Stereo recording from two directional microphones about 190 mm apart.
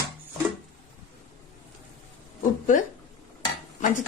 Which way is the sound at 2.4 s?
45° left (ahead or behind).